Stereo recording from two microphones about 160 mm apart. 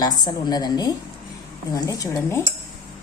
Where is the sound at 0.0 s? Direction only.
25° left (ahead or behind).